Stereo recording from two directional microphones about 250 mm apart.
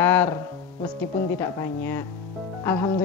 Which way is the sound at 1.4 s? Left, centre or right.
Centre.